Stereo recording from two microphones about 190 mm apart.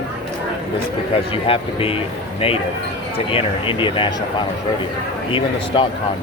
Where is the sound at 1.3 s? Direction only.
30° left (ahead or behind).